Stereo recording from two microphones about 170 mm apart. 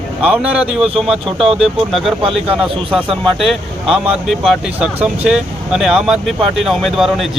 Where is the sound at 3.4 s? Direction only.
Centre (ahead or behind).